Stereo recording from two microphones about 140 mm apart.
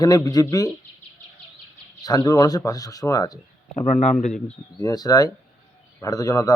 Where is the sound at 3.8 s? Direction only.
55° left (ahead or behind).